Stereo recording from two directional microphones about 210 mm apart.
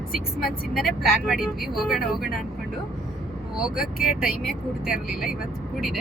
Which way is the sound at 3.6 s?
5° right (ahead or behind).